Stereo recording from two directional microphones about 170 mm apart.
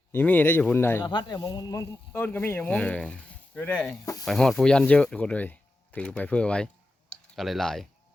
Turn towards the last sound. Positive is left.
turn(degrees=0)  # may be behind; listen again after turning